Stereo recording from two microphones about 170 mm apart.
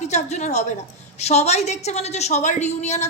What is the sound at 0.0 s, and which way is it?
A woman's voice, 40° left (ahead or behind).